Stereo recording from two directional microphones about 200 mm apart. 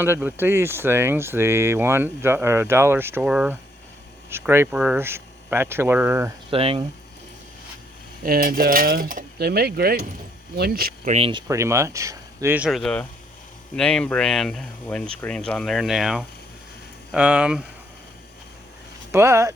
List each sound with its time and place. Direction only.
0.0 s speech: 10° right (ahead or behind)
6.5 s speech: 30° right (ahead or behind)
8.2 s cutlery: 45° right (ahead or behind)
11.1 s speech: 25° right (ahead or behind); by 17.6 s 5° right (ahead or behind)
19.1 s speech: 15° right (ahead or behind)